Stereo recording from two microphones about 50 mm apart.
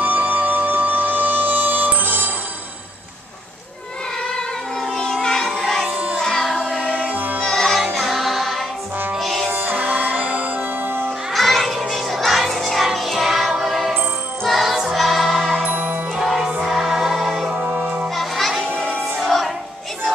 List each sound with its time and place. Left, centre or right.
0.0 s music: right
4.3 s music: centre
5.9 s music: right
6.2 s music: centre
6.9 s music: right
7.4 s music: centre
9.5 s music: right
11.3 s music: centre
15.6 s music: right
16.2 s music: centre
18.1 s children playing: centre
19.1 s music: centre